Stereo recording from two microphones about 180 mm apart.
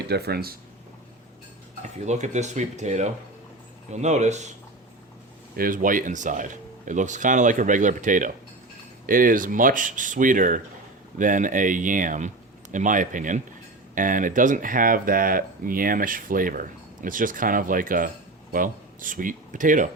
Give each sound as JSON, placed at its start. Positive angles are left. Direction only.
{"t": 0.1, "sound": "speech", "side_deg": -60}
{"t": 2.0, "sound": "speech", "side_deg": -40}
{"t": 5.5, "sound": "speech", "side_deg": -50}